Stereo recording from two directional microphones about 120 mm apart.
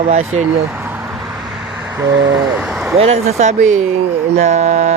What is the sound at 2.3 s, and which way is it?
Speech, 5° right (ahead or behind).